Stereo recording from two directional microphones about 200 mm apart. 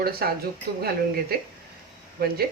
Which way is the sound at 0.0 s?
50° right (ahead or behind).